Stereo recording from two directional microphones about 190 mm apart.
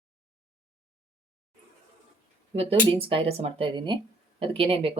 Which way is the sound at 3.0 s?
30° right (ahead or behind).